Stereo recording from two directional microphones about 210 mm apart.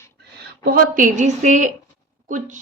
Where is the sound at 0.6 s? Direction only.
45° right (ahead or behind).